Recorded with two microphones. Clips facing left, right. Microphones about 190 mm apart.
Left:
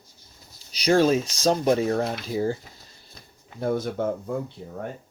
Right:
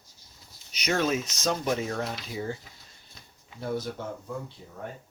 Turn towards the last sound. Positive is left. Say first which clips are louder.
# left 9 dB
turn(degrees=55)  # may be behind; listen again after turning